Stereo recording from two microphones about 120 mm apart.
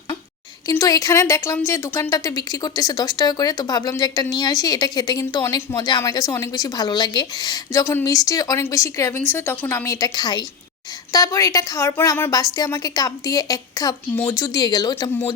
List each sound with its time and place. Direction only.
0.8 s a woman's voice: 30° left (ahead or behind)
12.3 s speech: 30° left (ahead or behind)